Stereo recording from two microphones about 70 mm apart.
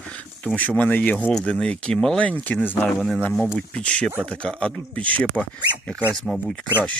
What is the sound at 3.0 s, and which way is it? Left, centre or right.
Speech, centre.